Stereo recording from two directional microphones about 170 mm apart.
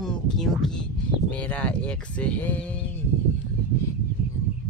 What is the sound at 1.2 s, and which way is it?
Speech, 10° left (ahead or behind).